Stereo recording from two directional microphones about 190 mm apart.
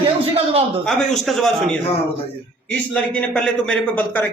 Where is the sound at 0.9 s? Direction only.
Centre (ahead or behind).